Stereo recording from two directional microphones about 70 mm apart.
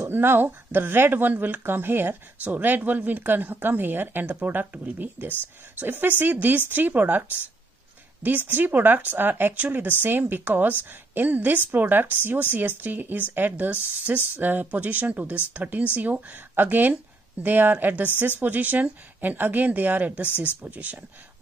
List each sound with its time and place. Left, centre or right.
0.0 s speech: right
8.5 s speech: right
20.2 s speech: left
20.6 s speech: right